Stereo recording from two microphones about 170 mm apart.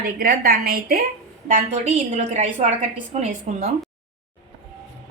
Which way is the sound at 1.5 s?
45° right (ahead or behind).